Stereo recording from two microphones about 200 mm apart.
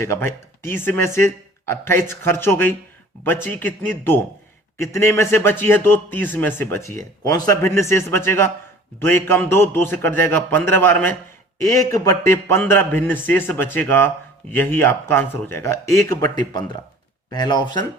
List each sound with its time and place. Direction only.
0.0 s a man's voice: 10° left (ahead or behind)
17.3 s speech: 20° left (ahead or behind)